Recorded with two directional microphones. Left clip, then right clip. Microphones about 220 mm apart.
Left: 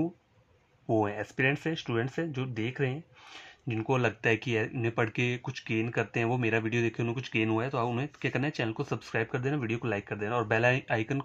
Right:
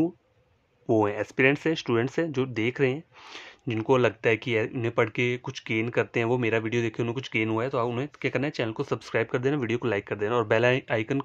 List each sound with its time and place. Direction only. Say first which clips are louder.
0.8 s speech: right 5 dB; 35° right (ahead or behind)